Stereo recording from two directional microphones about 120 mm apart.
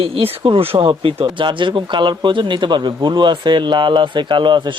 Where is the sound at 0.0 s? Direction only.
50° right (ahead or behind).